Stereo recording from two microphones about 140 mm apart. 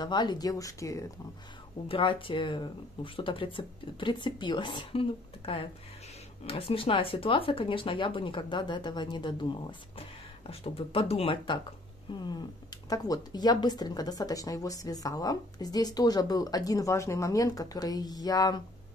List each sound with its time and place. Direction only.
0.0 s speech: 30° left (ahead or behind)
1.9 s speech: 40° left (ahead or behind)